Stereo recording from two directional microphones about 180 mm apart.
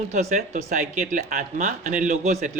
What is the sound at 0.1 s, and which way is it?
A man's voice, 40° right (ahead or behind).